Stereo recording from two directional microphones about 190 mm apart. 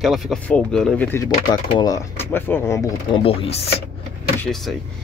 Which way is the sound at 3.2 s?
30° left (ahead or behind).